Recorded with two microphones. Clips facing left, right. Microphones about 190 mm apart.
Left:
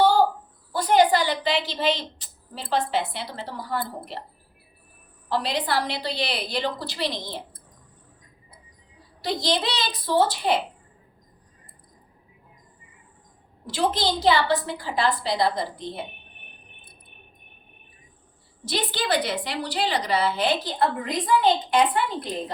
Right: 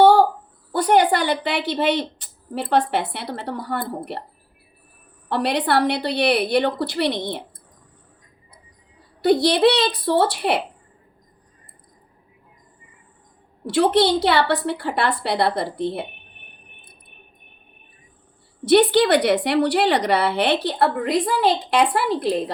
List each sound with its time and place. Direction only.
0.0 s a sound: 65° right (ahead or behind)
0.7 s a woman's voice: 60° right (ahead or behind)
5.3 s a woman's voice: 60° right (ahead or behind)
9.2 s a woman's voice: 60° right (ahead or behind)
13.7 s a woman's voice: 65° right (ahead or behind)
18.6 s a woman's voice: 65° right (ahead or behind)